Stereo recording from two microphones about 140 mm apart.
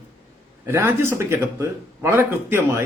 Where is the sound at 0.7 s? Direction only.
15° right (ahead or behind).